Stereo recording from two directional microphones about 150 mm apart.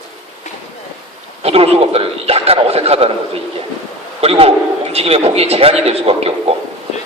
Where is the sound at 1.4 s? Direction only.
40° right (ahead or behind).